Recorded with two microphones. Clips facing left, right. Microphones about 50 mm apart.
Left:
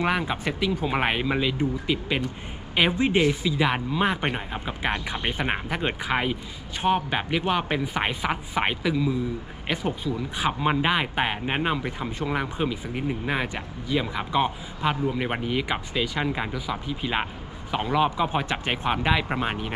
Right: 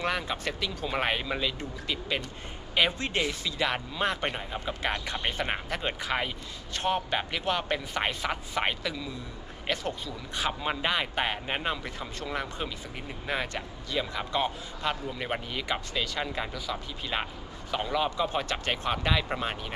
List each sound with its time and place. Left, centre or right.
0.0 s speech: centre